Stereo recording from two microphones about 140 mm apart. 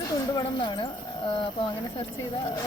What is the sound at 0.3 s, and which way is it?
Speech, 35° left (ahead or behind).